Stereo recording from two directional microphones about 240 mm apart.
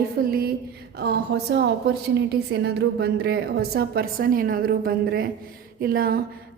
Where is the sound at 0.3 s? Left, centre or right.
Right.